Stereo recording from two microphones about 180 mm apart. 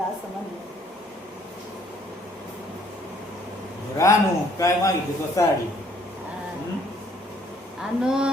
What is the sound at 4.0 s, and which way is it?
Speech, 20° left (ahead or behind).